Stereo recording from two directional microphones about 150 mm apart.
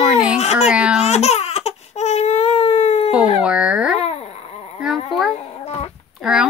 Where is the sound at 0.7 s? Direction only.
5° right (ahead or behind).